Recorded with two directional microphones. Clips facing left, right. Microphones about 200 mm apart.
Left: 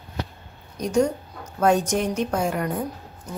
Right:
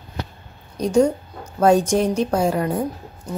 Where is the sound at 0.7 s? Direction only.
30° right (ahead or behind).